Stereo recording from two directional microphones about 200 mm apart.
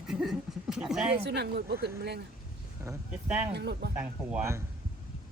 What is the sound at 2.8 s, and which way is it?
Speech, 10° right (ahead or behind).